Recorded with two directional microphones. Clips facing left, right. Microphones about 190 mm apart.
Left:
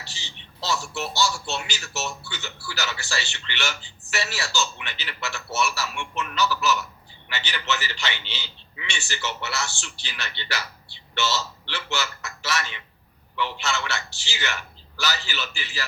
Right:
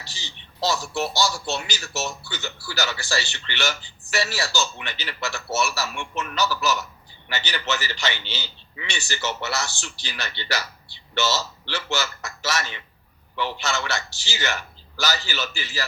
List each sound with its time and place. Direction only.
0.0 s a man's voice: 40° right (ahead or behind)